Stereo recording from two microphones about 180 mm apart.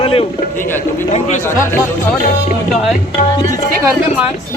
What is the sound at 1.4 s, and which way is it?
Speech, 15° left (ahead or behind).